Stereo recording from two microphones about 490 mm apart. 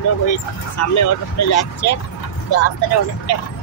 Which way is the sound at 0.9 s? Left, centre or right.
Left.